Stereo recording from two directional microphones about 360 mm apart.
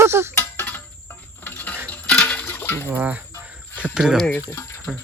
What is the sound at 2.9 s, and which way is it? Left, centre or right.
Chicken, centre.